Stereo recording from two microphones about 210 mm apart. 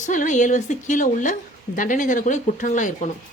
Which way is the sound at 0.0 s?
35° left (ahead or behind).